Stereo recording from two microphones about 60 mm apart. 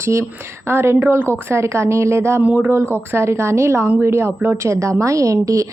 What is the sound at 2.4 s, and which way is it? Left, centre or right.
Speech, right.